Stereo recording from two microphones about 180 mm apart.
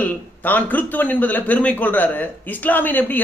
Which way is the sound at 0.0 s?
10° left (ahead or behind).